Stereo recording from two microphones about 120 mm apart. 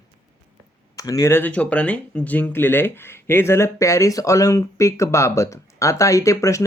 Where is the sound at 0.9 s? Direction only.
30° left (ahead or behind).